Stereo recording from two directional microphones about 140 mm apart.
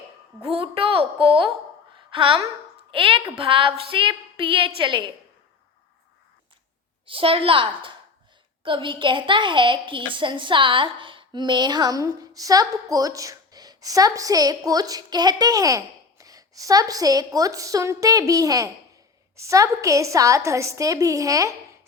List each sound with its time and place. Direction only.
0.5 s a woman's voice: 40° right (ahead or behind)
7.0 s a woman's voice: 40° right (ahead or behind); by 21.5 s 25° right (ahead or behind)